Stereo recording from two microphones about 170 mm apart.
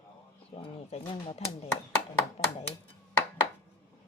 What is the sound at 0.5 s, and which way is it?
Speech, 35° left (ahead or behind).